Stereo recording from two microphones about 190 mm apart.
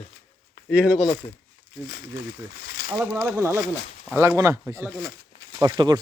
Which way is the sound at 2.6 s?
50° left (ahead or behind).